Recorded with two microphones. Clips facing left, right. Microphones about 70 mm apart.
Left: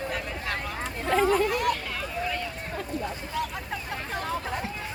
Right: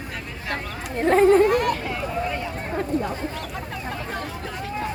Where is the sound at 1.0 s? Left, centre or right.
Right.